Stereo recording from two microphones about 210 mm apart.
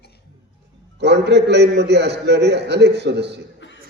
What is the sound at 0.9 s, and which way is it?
A man's voice, 55° right (ahead or behind).